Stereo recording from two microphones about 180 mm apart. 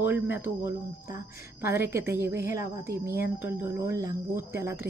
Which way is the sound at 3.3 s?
10° right (ahead or behind).